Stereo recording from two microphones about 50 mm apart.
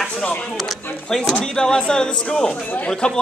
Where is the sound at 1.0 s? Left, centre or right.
Centre.